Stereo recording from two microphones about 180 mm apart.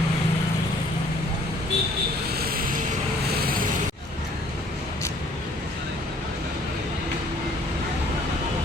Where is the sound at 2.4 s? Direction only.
55° right (ahead or behind).